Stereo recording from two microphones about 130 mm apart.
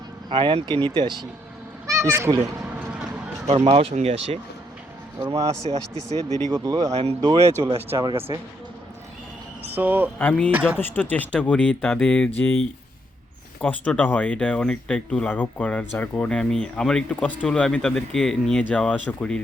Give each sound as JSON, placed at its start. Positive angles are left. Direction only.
{"t": 0.3, "sound": "speech", "side_deg": -40}
{"t": 1.9, "sound": "speech", "side_deg": -20}
{"t": 2.6, "sound": "a sound", "side_deg": -15}
{"t": 3.5, "sound": "speech", "side_deg": -50}
{"t": 5.2, "sound": "speech", "side_deg": -25}
{"t": 6.5, "sound": "speech", "side_deg": -30}
{"t": 6.9, "sound": "speech", "side_deg": -50}
{"t": 7.2, "sound": "speech", "side_deg": -30}
{"t": 9.7, "sound": "speech", "side_deg": -15}
{"t": 10.2, "sound": "speech", "side_deg": 10}
{"t": 10.5, "sound": "speech", "side_deg": -10}
{"t": 10.8, "sound": "speech", "side_deg": 15}
{"t": 13.6, "sound": "speech", "side_deg": 10}